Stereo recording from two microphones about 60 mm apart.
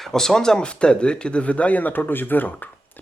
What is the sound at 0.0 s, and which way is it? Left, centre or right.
Speech, centre.